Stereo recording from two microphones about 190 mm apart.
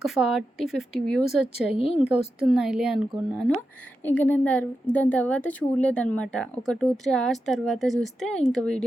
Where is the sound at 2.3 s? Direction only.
Centre (ahead or behind).